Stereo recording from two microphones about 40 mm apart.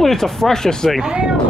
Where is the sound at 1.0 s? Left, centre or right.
Right.